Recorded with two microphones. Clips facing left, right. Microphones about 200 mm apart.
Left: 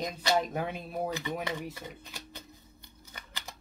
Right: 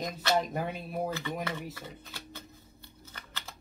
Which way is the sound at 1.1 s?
15° left (ahead or behind).